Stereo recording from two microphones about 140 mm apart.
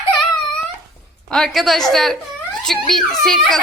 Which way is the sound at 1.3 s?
Centre (ahead or behind).